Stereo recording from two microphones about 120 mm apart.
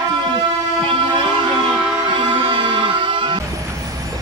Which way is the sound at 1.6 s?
45° right (ahead or behind).